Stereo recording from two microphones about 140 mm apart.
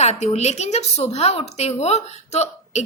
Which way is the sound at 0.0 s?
55° left (ahead or behind).